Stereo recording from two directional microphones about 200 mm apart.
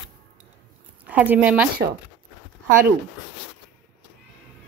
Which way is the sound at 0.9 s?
5° right (ahead or behind).